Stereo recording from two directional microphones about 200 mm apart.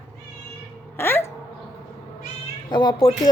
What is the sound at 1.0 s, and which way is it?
Speech, 10° left (ahead or behind).